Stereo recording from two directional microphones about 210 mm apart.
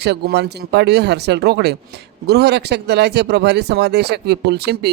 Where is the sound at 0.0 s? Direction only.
50° right (ahead or behind).